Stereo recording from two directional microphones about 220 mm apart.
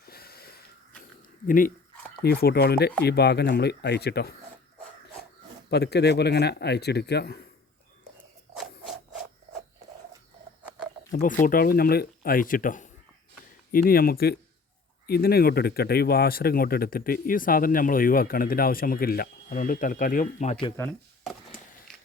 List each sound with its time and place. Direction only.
0.0 s wheeze: 45° left (ahead or behind)
1.5 s speech: 40° left (ahead or behind)
5.7 s speech: 50° left (ahead or behind)
8.5 s a sound: centre (ahead or behind)
11.1 s speech: 35° left (ahead or behind)
20.7 s speech: 5° left (ahead or behind)